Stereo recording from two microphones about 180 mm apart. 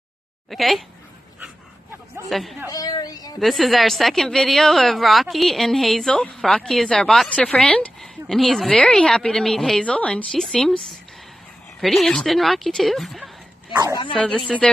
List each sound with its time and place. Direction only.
0.5 s a woman's voice: centre (ahead or behind)
2.2 s a woman's voice: centre (ahead or behind)
2.7 s speech: 20° left (ahead or behind)
3.3 s a woman's voice: centre (ahead or behind)
11.8 s a woman's voice: centre (ahead or behind)